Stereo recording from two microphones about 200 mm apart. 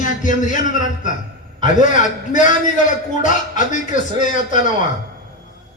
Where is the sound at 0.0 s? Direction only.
40° left (ahead or behind).